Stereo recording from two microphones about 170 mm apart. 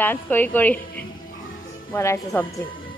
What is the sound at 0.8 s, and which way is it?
Music, 60° left (ahead or behind).